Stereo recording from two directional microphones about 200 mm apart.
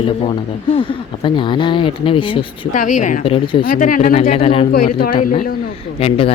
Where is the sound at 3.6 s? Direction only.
40° left (ahead or behind).